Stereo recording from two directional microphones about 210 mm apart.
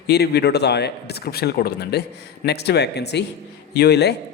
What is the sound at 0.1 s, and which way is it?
A man's voice, 50° left (ahead or behind).